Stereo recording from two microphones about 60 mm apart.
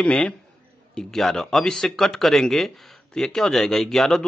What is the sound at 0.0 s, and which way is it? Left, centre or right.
A man's voice, centre.